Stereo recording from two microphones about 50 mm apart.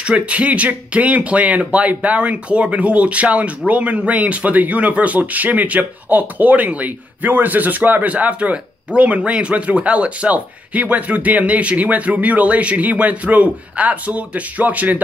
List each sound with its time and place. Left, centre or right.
0.0 s speech: right